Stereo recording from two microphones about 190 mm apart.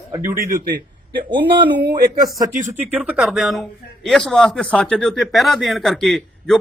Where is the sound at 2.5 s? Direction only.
40° right (ahead or behind).